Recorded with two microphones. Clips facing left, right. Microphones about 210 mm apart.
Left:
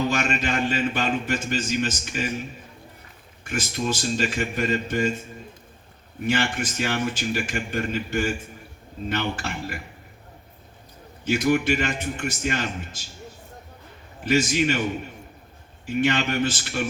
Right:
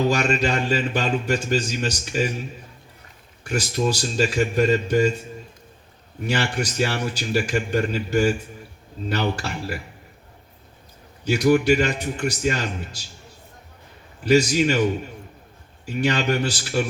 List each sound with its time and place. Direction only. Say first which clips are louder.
0.1 s a man's voice: right 4 dB; 35° right (ahead or behind)
3.4 s a man's voice: right 4 dB; 40° right (ahead or behind)
6.2 s a man's voice: even; 40° right (ahead or behind)
11.3 s a man's voice: right 4 dB; 35° right (ahead or behind)
14.3 s a man's voice: right 4 dB; 35° right (ahead or behind)
16.0 s a man's voice: right 1 dB; 35° right (ahead or behind)